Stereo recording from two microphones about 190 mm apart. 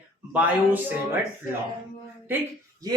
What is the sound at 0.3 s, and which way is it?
Speech, 10° right (ahead or behind).